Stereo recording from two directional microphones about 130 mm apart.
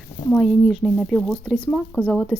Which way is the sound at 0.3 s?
Centre (ahead or behind).